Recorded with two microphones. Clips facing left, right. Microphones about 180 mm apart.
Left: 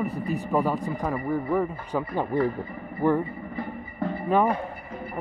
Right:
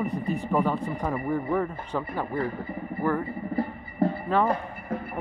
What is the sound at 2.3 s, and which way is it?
Speech, 20° left (ahead or behind).